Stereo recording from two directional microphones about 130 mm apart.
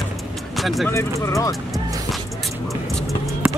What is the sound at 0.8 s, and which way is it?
Speech, 20° left (ahead or behind).